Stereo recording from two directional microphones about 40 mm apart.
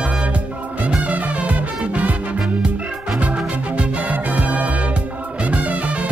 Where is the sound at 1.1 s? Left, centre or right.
Right.